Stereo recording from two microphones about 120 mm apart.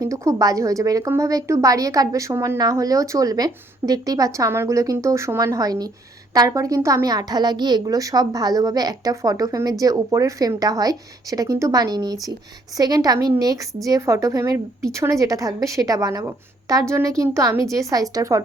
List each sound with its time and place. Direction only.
0.0 s a woman's voice: 30° right (ahead or behind)